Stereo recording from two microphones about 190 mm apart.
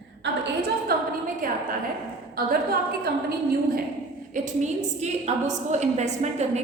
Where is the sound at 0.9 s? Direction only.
55° right (ahead or behind).